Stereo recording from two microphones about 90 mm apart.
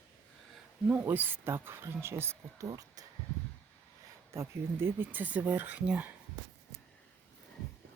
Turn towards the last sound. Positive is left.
turn(degrees=-15)  # may be behind; listen again after turning